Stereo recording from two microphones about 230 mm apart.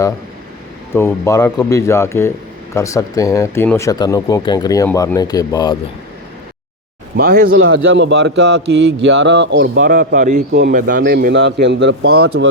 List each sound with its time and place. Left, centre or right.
0.9 s speech: centre
7.2 s a man's voice: right